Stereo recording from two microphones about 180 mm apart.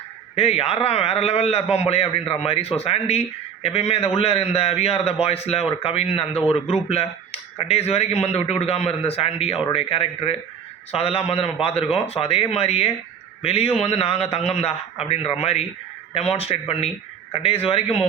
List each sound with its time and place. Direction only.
0.3 s speech: 35° left (ahead or behind)